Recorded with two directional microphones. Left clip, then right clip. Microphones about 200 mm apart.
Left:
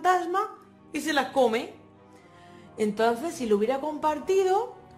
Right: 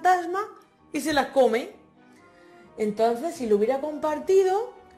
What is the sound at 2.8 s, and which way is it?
A woman's voice, centre (ahead or behind).